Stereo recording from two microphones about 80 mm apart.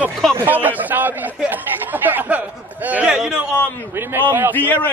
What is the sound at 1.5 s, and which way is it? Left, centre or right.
Chatter, right.